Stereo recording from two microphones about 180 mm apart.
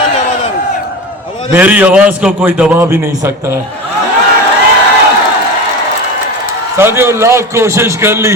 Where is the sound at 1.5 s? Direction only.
10° right (ahead or behind).